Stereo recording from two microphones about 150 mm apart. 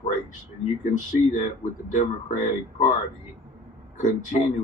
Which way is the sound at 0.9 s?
60° left (ahead or behind).